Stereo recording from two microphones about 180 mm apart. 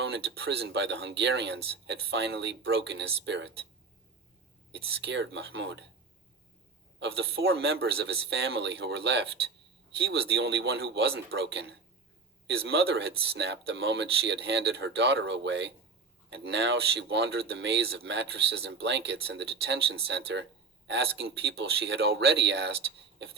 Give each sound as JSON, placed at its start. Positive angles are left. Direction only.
{"t": 0.0, "sound": "speech", "side_deg": -65}
{"t": 4.9, "sound": "speech", "side_deg": -85}
{"t": 7.0, "sound": "speech", "side_deg": -70}
{"t": 12.6, "sound": "speech", "side_deg": -70}